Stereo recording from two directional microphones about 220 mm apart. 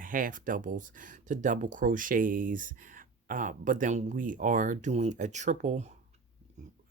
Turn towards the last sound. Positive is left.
turn(degrees=-30)  # may be behind; listen again after turning